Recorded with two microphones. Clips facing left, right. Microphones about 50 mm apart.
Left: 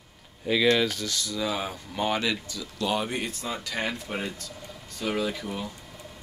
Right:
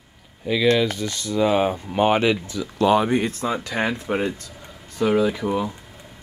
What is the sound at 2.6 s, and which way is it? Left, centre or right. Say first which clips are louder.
Speech: right 11 dB; right.